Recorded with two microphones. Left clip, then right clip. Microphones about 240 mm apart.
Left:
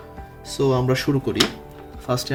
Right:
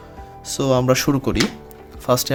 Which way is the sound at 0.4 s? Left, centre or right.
Right.